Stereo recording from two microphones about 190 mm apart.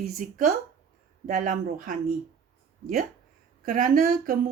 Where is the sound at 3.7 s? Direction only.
45° right (ahead or behind).